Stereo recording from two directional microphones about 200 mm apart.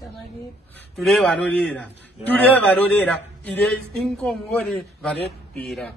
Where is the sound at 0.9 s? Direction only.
Centre (ahead or behind).